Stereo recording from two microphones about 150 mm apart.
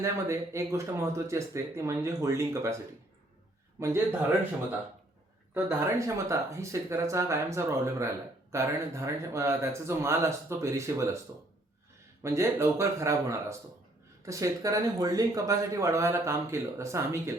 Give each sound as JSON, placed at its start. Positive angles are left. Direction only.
{"t": 0.0, "sound": "speech", "side_deg": -20}
{"t": 3.8, "sound": "speech", "side_deg": -20}
{"t": 6.0, "sound": "speech", "side_deg": -20}
{"t": 12.2, "sound": "speech", "side_deg": -20}